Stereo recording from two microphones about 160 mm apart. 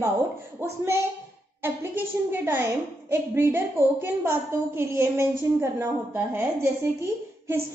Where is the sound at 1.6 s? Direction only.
15° right (ahead or behind).